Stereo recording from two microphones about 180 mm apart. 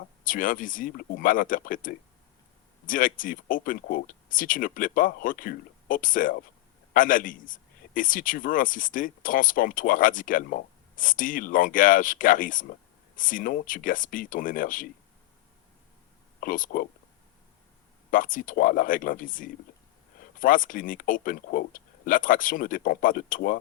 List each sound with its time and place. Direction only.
0.3 s a man's voice: 50° left (ahead or behind)
16.4 s a man's voice: 50° left (ahead or behind)
18.1 s a man's voice: 50° left (ahead or behind)